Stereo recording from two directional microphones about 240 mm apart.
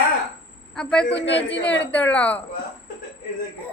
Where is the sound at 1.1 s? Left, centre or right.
Left.